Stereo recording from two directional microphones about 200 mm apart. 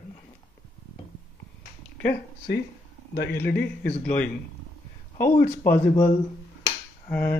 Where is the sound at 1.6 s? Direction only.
55° left (ahead or behind).